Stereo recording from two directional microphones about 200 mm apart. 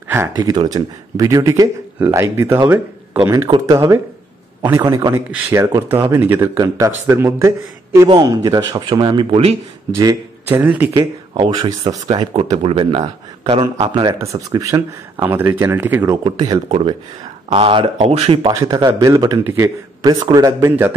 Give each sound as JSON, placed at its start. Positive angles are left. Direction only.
{"t": 0.4, "sound": "a man's voice", "side_deg": -20}
{"t": 9.9, "sound": "speech", "side_deg": -15}
{"t": 16.3, "sound": "a man's voice", "side_deg": -25}
{"t": 18.5, "sound": "speech", "side_deg": -15}